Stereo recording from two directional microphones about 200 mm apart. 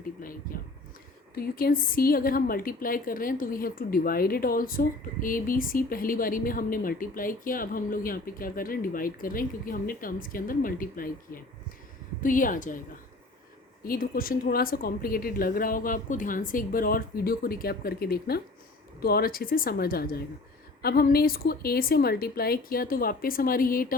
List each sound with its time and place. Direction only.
1.4 s a woman's voice: 45° left (ahead or behind)
13.8 s a woman's voice: 45° left (ahead or behind)